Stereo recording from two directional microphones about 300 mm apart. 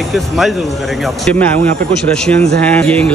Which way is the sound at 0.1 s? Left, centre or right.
Centre.